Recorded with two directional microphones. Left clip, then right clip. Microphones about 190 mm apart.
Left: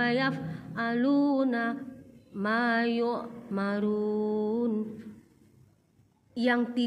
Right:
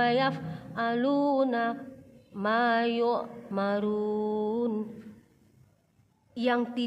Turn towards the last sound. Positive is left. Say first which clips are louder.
# even
turn(degrees=-5)  # may be behind; listen again after turning